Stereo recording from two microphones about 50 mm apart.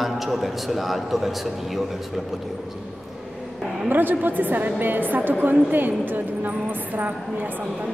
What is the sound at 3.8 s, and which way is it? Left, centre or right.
A woman's voice, right.